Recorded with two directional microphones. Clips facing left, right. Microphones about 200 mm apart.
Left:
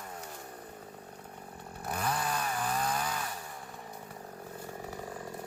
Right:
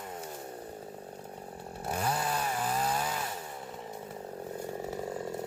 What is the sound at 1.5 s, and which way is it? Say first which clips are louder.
Chainsaw: right 2 dB; 30° right (ahead or behind).